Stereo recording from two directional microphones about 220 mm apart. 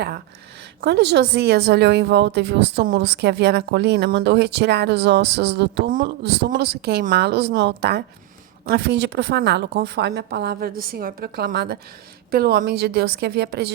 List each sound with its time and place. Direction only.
0.8 s a woman's voice: 50° right (ahead or behind)